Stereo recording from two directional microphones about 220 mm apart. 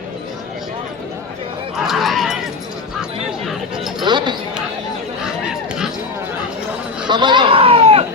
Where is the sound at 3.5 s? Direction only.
Centre (ahead or behind).